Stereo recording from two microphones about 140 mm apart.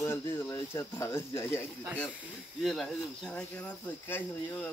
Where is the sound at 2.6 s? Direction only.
Centre (ahead or behind).